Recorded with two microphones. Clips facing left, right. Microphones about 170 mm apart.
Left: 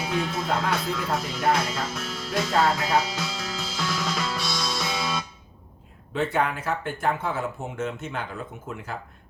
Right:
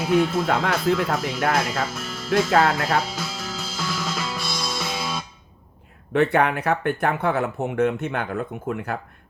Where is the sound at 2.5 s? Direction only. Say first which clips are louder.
Right 2 dB; 60° right (ahead or behind).